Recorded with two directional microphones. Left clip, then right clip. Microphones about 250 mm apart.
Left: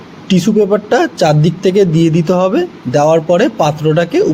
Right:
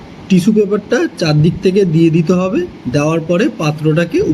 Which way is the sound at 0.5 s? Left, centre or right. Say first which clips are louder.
Left 4 dB; centre.